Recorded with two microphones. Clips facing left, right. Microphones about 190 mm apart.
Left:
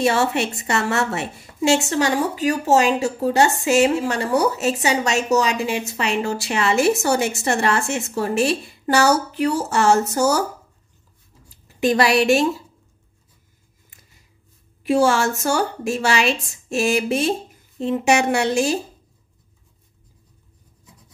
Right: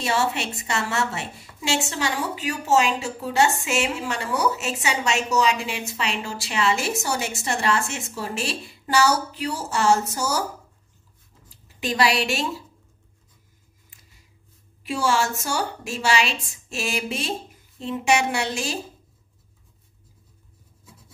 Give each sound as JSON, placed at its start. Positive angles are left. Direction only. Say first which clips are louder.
{"t": 0.0, "sound": "a woman's voice", "louder": "left 5 dB", "side_deg": 55}
{"t": 11.8, "sound": "a woman's voice", "louder": "left 6 dB", "side_deg": 50}
{"t": 14.8, "sound": "a woman's voice", "louder": "left 6 dB", "side_deg": 55}